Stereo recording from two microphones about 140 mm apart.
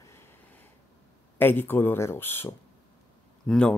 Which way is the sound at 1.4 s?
15° left (ahead or behind).